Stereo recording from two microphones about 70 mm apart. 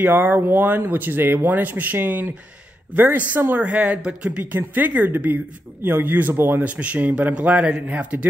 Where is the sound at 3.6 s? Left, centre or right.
Centre.